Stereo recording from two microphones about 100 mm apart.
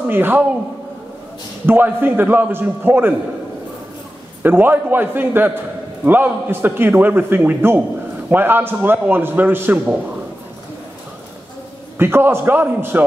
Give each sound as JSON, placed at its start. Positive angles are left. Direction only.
{"t": 0.1, "sound": "a man's voice", "side_deg": -20}
{"t": 1.7, "sound": "a man's voice", "side_deg": -20}
{"t": 4.4, "sound": "a man's voice", "side_deg": -20}
{"t": 12.0, "sound": "a man's voice", "side_deg": -25}